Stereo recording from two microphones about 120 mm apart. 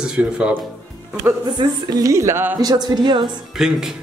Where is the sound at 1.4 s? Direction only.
40° right (ahead or behind); by 2.6 s 20° right (ahead or behind).